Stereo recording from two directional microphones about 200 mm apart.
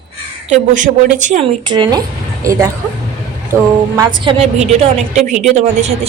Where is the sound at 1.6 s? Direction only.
20° right (ahead or behind).